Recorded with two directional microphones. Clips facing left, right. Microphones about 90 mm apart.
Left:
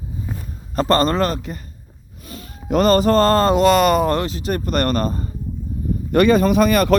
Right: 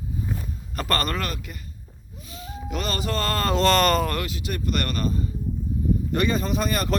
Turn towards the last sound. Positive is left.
turn(degrees=75)  # may be behind; listen again after turning